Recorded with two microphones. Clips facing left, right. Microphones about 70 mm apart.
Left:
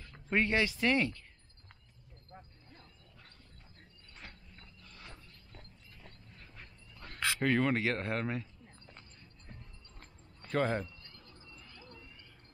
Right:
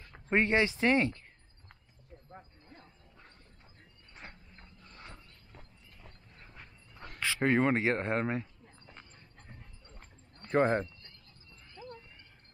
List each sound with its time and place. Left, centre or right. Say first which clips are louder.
0.0 s speech: right 3 dB; right
2.2 s dog: right 1 dB; centre
4.2 s a sound: right 2 dB; right
5.5 s dog: even; centre
7.3 s speech: right 3 dB; right
10.5 s a sound: right 5 dB; right